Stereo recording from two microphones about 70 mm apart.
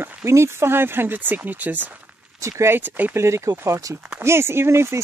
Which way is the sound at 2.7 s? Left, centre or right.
Right.